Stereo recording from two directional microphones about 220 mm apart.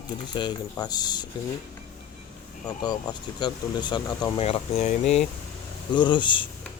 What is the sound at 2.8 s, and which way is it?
Speech, 20° left (ahead or behind).